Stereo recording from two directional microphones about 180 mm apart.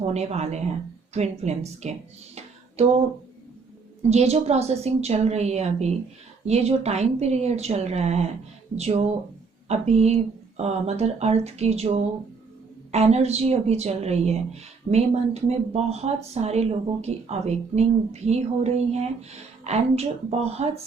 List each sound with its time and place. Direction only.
0.0 s speech: 35° right (ahead or behind)
4.1 s speech: 35° right (ahead or behind)